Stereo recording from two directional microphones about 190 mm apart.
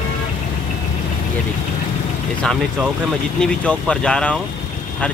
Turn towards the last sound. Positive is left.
turn(degrees=5)  # may be behind; listen again after turning